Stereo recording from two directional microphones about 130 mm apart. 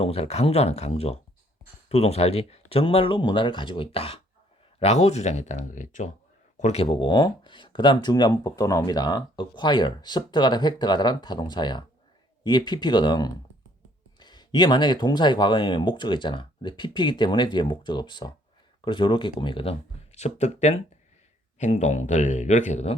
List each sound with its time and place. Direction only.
0.0 s speech: 50° left (ahead or behind); by 6.1 s 70° left (ahead or behind)
6.6 s speech: 55° left (ahead or behind)
20.1 s speech: 60° left (ahead or behind)